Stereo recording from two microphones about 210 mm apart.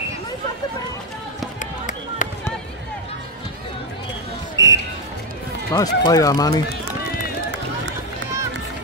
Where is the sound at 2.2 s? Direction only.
40° left (ahead or behind).